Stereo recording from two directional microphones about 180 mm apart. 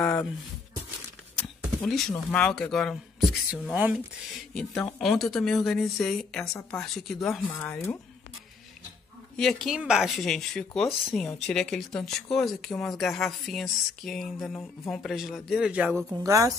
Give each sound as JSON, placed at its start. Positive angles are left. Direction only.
{"t": 0.0, "sound": "a sound", "side_deg": 10}
{"t": 1.4, "sound": "speech", "side_deg": 5}
{"t": 9.4, "sound": "speech", "side_deg": 0}
{"t": 16.3, "sound": "a woman's voice", "side_deg": -15}